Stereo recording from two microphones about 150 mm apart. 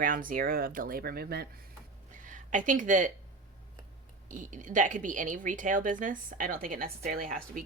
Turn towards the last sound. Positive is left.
turn(degrees=-65)  # may be behind; listen again after turning